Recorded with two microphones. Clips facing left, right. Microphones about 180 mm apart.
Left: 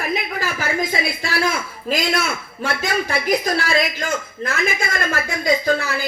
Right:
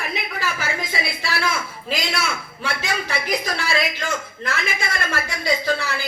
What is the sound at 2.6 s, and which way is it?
A man's voice, 45° left (ahead or behind).